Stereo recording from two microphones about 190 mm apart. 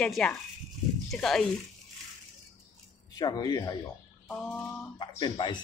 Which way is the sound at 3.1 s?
20° left (ahead or behind).